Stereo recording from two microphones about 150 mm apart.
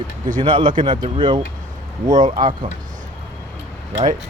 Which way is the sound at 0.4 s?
35° right (ahead or behind).